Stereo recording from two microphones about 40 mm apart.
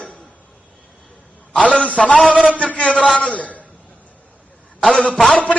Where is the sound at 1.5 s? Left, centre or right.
Left.